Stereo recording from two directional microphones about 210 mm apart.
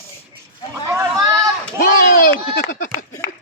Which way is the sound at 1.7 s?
45° left (ahead or behind).